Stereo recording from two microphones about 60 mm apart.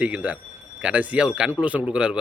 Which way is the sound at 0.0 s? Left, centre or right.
Right.